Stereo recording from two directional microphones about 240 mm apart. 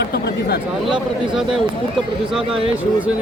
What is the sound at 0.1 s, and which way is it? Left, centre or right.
Chatter, left.